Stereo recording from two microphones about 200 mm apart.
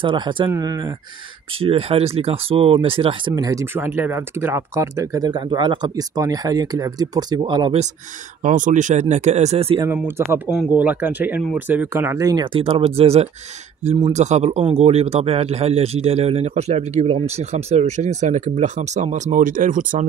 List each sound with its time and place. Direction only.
0.0 s speech: 25° right (ahead or behind)
8.4 s speech: 40° right (ahead or behind)
9.8 s speech: 10° right (ahead or behind); by 20.1 s 40° right (ahead or behind)